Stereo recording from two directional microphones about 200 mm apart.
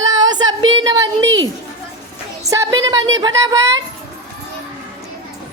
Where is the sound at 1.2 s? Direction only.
70° right (ahead or behind).